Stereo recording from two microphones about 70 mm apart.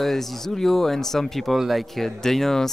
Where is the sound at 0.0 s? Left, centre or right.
Centre.